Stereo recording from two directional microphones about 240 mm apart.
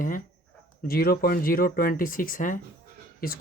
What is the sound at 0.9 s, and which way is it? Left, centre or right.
Speech, left.